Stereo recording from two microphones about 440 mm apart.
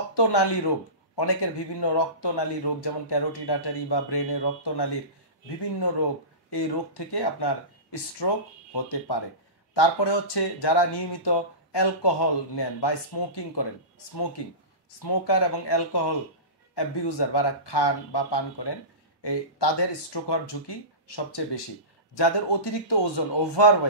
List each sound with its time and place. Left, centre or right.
0.1 s a man's voice: left
6.5 s a man's voice: left
15.0 s a man's voice: left